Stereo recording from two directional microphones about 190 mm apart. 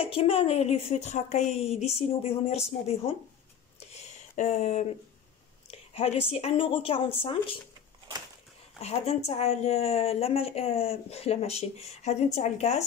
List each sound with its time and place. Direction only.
0.0 s a woman's voice: 30° left (ahead or behind)
3.9 s a sound: 35° left (ahead or behind)
5.7 s a woman's voice: 30° left (ahead or behind)
8.8 s a woman's voice: 35° left (ahead or behind)